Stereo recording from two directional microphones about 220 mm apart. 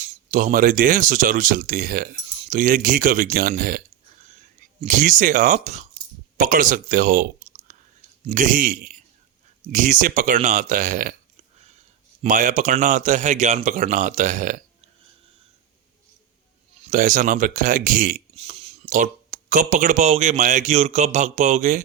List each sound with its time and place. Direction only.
0.0 s a man's voice: 35° right (ahead or behind)
7.7 s chewing: 35° right (ahead or behind)
8.3 s a man's voice: 35° right (ahead or behind)
12.2 s a man's voice: 35° right (ahead or behind)
16.8 s a man's voice: 35° right (ahead or behind)
18.3 s speech: 25° right (ahead or behind)